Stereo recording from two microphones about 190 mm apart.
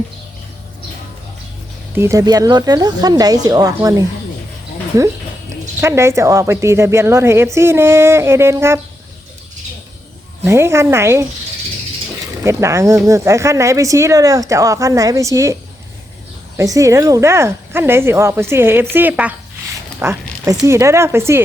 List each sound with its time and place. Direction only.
2.0 s speech: 15° right (ahead or behind)
5.8 s a woman's voice: 15° right (ahead or behind)
10.4 s a woman's voice: 15° right (ahead or behind)
12.4 s a woman's voice: 15° right (ahead or behind)
16.6 s a woman's voice: 15° right (ahead or behind)